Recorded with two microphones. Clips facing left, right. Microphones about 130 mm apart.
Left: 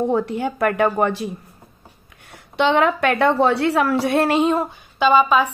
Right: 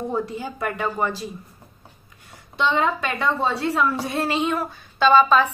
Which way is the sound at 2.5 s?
70° left (ahead or behind).